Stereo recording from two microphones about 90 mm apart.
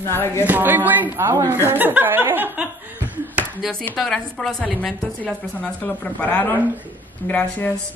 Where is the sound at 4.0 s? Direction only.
5° left (ahead or behind).